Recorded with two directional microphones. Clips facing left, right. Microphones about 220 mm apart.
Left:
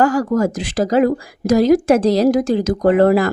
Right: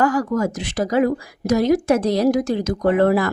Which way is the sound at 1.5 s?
90° left.